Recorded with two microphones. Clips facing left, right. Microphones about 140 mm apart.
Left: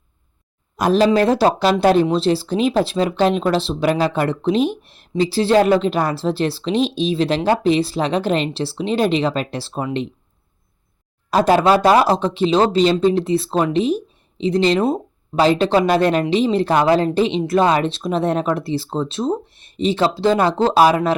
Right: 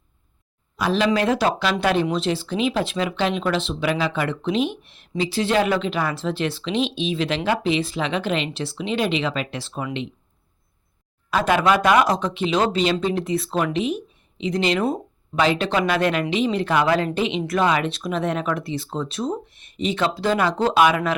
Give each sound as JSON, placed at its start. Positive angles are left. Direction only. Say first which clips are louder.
{"t": 0.8, "sound": "speech", "louder": "left 6 dB", "side_deg": 40}
{"t": 11.3, "sound": "speech", "louder": "left 5 dB", "side_deg": 35}